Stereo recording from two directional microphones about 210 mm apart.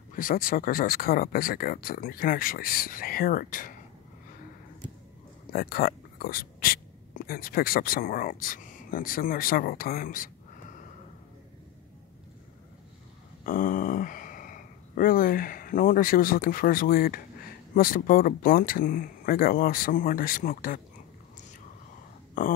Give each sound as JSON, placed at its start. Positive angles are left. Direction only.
{"t": 0.1, "sound": "speech", "side_deg": 40}
{"t": 5.5, "sound": "speech", "side_deg": 45}
{"t": 13.5, "sound": "speech", "side_deg": 40}